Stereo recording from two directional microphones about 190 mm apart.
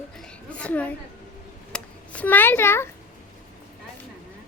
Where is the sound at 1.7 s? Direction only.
5° left (ahead or behind).